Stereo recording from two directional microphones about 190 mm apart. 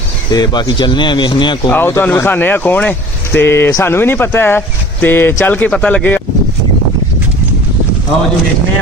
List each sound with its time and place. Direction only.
0.3 s speech: 20° left (ahead or behind)
1.7 s speech: 10° left (ahead or behind)